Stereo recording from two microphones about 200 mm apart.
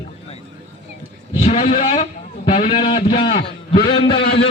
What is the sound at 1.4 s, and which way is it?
A man's voice, 35° left (ahead or behind).